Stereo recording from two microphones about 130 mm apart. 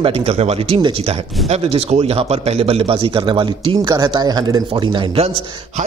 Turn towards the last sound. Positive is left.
turn(degrees=-35)  # may be behind; listen again after turning